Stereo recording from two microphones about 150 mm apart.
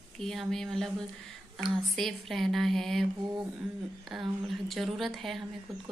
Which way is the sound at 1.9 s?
Centre (ahead or behind).